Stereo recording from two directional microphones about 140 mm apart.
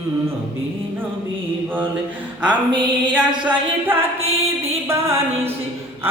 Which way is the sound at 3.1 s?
10° right (ahead or behind).